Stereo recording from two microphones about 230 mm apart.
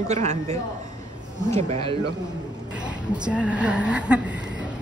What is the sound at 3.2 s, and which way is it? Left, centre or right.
A woman's voice, centre.